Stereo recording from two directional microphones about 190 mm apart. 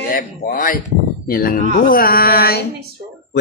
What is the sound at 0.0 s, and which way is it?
Speech, 50° left (ahead or behind).